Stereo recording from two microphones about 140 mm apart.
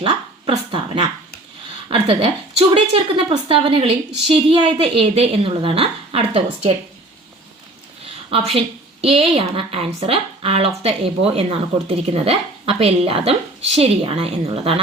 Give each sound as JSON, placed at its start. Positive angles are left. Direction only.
{"t": 0.5, "sound": "speech", "side_deg": -30}
{"t": 1.9, "sound": "a woman's voice", "side_deg": -40}
{"t": 8.0, "sound": "a woman's voice", "side_deg": -45}